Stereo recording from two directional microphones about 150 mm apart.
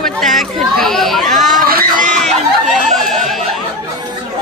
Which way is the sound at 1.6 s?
80° right.